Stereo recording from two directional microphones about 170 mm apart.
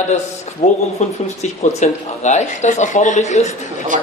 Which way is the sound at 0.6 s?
40° left (ahead or behind).